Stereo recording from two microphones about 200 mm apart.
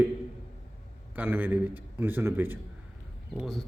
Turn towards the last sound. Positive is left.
turn(degrees=0)  # may be behind; listen again after turning